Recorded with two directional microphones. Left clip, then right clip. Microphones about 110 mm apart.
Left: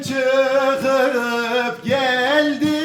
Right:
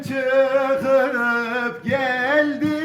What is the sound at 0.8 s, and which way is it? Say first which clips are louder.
Music: left 1 dB; 30° left (ahead or behind).